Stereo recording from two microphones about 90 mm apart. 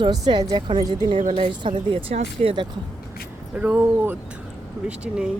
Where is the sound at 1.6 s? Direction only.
75° right (ahead or behind).